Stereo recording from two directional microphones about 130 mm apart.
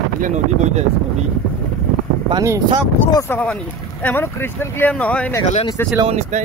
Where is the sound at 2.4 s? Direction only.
25° right (ahead or behind).